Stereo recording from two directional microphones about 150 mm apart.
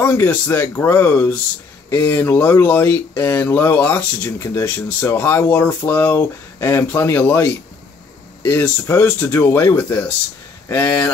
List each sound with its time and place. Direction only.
0.0 s speech: 15° left (ahead or behind)